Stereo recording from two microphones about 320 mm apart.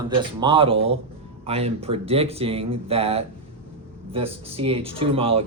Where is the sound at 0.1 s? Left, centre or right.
Centre.